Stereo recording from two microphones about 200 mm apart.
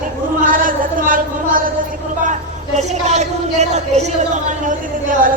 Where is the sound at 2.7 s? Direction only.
35° right (ahead or behind).